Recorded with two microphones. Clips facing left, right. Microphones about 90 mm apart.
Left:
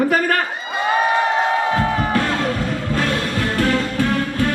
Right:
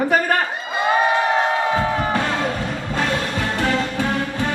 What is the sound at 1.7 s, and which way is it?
Music, 5° right (ahead or behind).